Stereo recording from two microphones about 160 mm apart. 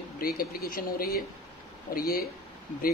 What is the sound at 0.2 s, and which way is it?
Speech, 65° left (ahead or behind).